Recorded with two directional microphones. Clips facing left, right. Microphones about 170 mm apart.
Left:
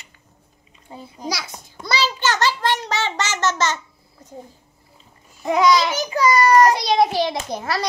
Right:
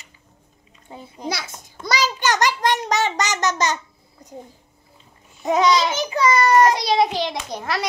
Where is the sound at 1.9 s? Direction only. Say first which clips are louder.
Right 1 dB; 15° right (ahead or behind).